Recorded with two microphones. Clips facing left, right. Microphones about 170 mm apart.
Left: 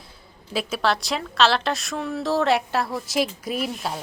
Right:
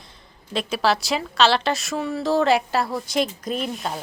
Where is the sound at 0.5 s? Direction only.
5° left (ahead or behind).